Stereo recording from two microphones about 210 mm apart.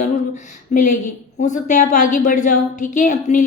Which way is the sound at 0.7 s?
40° left (ahead or behind).